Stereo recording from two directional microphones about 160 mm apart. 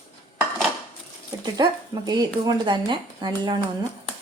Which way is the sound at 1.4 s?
25° right (ahead or behind).